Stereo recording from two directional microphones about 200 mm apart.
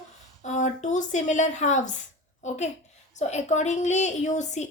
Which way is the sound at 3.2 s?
35° left (ahead or behind).